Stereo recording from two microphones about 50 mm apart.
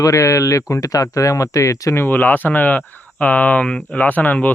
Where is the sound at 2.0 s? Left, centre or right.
Left.